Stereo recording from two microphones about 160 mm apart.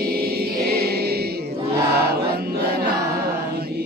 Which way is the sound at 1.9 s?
80° right.